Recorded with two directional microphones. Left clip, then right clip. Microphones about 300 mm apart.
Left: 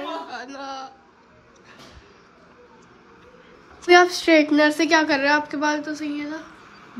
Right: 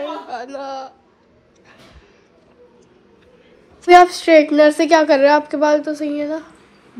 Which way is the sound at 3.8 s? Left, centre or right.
Centre.